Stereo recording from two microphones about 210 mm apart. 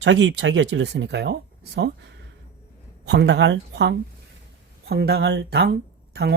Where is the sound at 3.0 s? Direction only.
55° right (ahead or behind).